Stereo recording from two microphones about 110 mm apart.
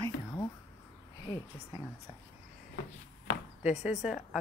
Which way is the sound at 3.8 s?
5° right (ahead or behind).